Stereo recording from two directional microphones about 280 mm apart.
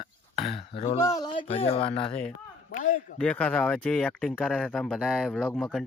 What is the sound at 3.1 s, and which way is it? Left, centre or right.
Speech, centre.